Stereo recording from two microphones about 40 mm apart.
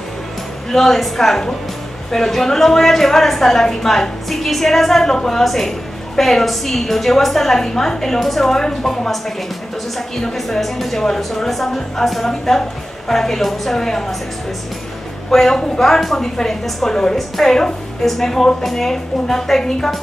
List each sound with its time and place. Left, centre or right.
0.7 s a woman's voice: centre
15.3 s a woman's voice: centre